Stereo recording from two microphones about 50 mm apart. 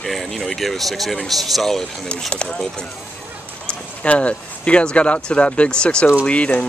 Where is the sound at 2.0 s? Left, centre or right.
Left.